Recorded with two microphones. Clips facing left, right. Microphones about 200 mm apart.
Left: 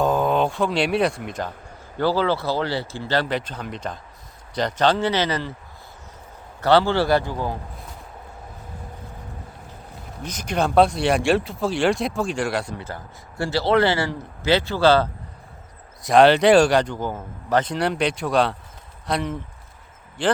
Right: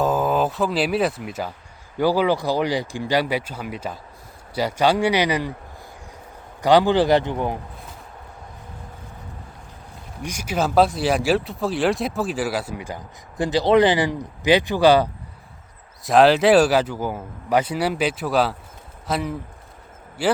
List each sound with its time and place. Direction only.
0.0 s speech: 5° right (ahead or behind)
6.6 s speech: 15° right (ahead or behind)
10.2 s speech: 10° right (ahead or behind)
16.0 s a man's voice: centre (ahead or behind)